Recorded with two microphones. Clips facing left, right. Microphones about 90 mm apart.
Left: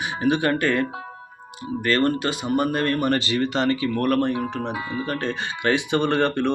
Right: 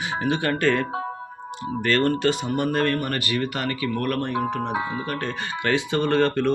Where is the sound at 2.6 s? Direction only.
15° left (ahead or behind).